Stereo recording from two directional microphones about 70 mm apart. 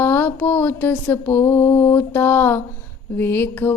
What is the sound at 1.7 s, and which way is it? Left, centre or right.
Mantra, left.